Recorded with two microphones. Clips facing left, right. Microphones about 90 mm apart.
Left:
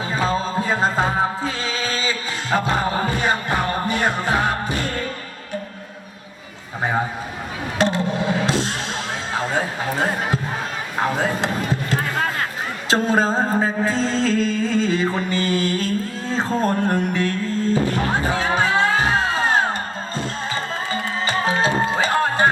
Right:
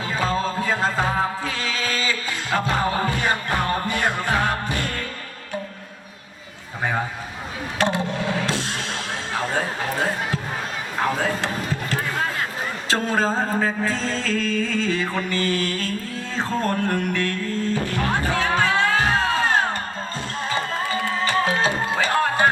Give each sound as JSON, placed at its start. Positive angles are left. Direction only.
{"t": 0.1, "sound": "music", "side_deg": 20}
{"t": 7.8, "sound": "a sound", "side_deg": 20}
{"t": 8.1, "sound": "music", "side_deg": 20}
{"t": 9.4, "sound": "a sound", "side_deg": 20}
{"t": 12.9, "sound": "music", "side_deg": 20}
{"t": 21.2, "sound": "music", "side_deg": 20}